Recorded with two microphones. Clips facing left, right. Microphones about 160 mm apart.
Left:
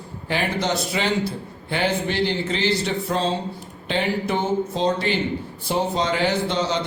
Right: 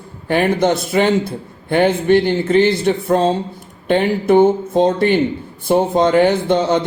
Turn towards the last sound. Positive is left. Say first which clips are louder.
# right 7 dB
turn(degrees=-55)  # may be behind; listen again after turning